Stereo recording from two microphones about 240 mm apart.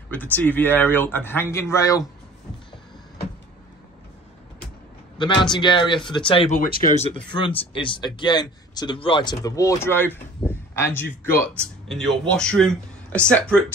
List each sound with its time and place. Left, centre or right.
0.1 s speech: centre
5.1 s speech: centre
7.2 s speech: centre